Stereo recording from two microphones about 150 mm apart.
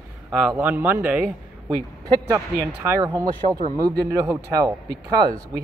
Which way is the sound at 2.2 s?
20° right (ahead or behind).